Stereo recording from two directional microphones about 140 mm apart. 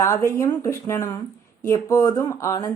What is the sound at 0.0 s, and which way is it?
A woman's voice, 20° left (ahead or behind).